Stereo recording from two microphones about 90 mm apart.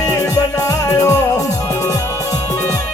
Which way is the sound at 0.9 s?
30° left (ahead or behind).